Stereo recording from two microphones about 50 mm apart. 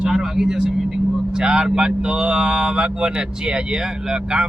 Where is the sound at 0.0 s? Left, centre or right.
Centre.